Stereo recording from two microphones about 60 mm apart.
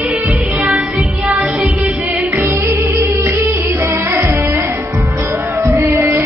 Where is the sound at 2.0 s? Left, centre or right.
Right.